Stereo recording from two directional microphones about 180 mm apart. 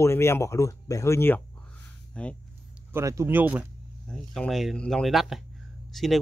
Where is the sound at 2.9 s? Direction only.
15° right (ahead or behind).